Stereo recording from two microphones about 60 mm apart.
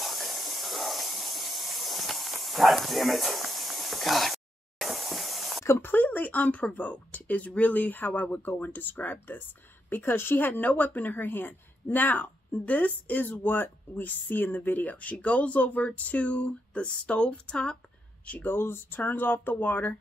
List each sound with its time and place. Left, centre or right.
0.0 s steam: centre
5.8 s a woman's voice: left
18.2 s a woman's voice: left